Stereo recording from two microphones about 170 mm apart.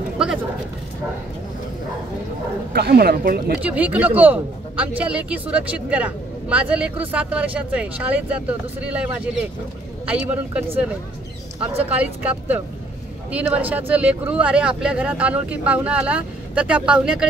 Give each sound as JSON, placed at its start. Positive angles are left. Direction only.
{"t": 2.7, "sound": "speech", "side_deg": -70}
{"t": 3.6, "sound": "speech", "side_deg": -10}
{"t": 11.8, "sound": "speech", "side_deg": -10}